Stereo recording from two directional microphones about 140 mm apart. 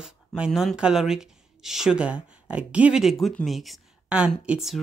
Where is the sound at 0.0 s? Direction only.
Centre (ahead or behind).